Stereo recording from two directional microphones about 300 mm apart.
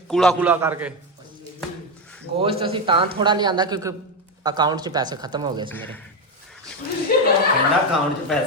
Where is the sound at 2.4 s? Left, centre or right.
Centre.